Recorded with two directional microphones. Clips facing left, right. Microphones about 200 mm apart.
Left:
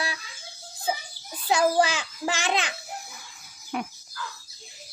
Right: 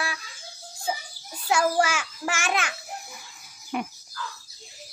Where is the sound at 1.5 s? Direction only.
20° left (ahead or behind).